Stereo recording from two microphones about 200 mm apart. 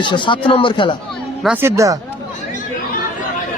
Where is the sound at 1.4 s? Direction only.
10° right (ahead or behind).